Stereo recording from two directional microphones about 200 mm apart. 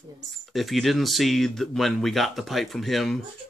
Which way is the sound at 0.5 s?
Centre (ahead or behind).